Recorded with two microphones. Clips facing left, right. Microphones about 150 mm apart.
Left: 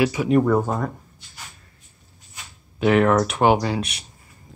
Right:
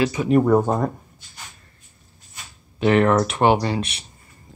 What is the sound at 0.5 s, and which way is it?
Speech, 20° right (ahead or behind).